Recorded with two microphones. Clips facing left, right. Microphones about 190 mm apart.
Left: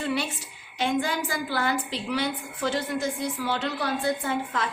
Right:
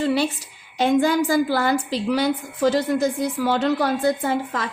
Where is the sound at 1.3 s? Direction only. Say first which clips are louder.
Right 8 dB; 40° right (ahead or behind).